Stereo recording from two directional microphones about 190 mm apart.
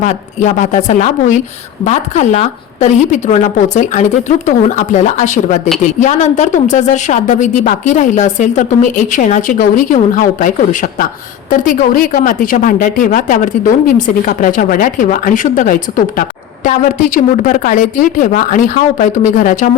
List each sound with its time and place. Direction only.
0.0 s a woman's voice: 40° left (ahead or behind)